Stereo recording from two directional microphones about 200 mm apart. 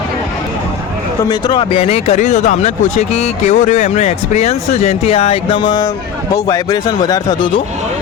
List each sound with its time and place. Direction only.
1.2 s speech: 20° left (ahead or behind)